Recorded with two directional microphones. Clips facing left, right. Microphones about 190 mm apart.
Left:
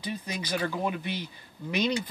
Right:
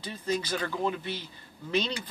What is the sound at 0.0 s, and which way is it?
Speech, 15° left (ahead or behind).